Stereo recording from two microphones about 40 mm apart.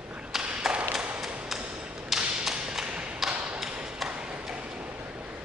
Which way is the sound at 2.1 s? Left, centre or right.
Centre.